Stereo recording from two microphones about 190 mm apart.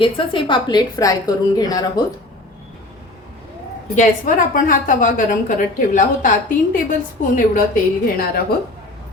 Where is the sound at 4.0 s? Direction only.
45° left (ahead or behind).